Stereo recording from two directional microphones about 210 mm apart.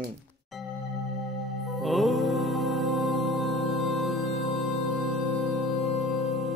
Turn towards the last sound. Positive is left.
turn(degrees=0)  # may be behind; listen again after turning